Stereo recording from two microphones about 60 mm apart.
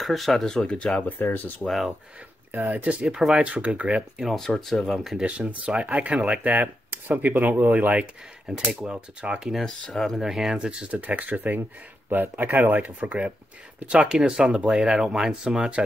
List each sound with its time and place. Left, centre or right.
0.0 s speech: centre
0.7 s speech: centre
1.2 s speech: left
1.7 s speech: centre
2.5 s speech: right
4.2 s speech: centre
5.2 s speech: centre
8.5 s speech: centre
9.4 s speech: centre
10.2 s speech: centre
10.9 s speech: right